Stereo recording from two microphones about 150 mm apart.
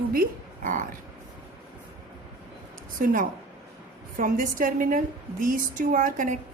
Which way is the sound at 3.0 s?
65° right (ahead or behind).